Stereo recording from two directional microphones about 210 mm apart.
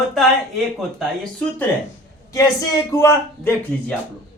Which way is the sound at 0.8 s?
Centre (ahead or behind).